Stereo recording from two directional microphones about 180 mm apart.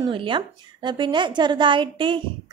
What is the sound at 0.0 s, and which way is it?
A woman's voice, 30° right (ahead or behind).